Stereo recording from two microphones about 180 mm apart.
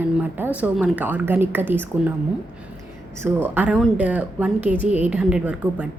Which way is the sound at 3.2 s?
10° right (ahead or behind).